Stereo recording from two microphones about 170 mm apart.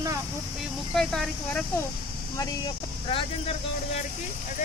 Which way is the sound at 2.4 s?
30° left (ahead or behind).